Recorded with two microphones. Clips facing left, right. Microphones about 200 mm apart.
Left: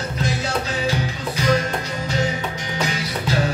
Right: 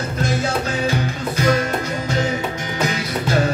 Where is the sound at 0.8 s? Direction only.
50° right (ahead or behind).